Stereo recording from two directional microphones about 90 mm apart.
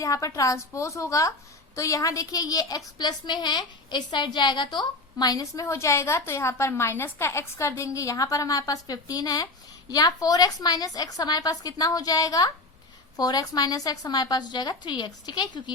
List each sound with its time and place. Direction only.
0.0 s a woman's voice: 40° left (ahead or behind); by 15.7 s 55° left (ahead or behind)